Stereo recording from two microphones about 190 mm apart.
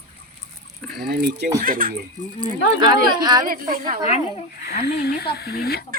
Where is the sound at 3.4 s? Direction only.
50° right (ahead or behind).